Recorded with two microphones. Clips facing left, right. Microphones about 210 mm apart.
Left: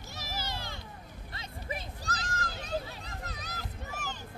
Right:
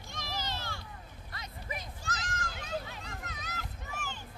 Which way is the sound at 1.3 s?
30° left (ahead or behind).